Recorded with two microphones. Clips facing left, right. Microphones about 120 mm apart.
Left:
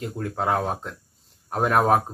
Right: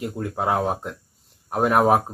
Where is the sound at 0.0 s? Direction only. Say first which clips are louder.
Right 1 dB; 5° right (ahead or behind).